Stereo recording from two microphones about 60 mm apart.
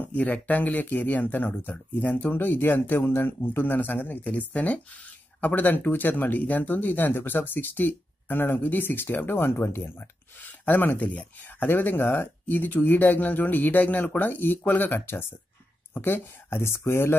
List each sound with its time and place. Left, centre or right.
0.0 s speech: left